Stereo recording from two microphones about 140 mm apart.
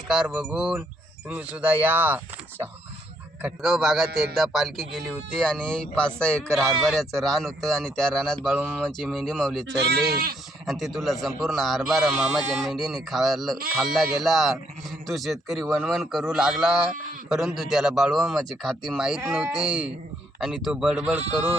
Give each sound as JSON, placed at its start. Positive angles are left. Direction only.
{"t": 0.1, "sound": "a man's voice", "side_deg": -5}
{"t": 3.4, "sound": "a man's voice", "side_deg": 0}
{"t": 8.4, "sound": "speech", "side_deg": -10}
{"t": 8.9, "sound": "a man's voice", "side_deg": 0}
{"t": 10.1, "sound": "speech", "side_deg": -90}
{"t": 10.7, "sound": "a man's voice", "side_deg": 0}